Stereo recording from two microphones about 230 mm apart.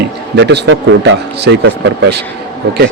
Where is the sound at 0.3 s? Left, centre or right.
Right.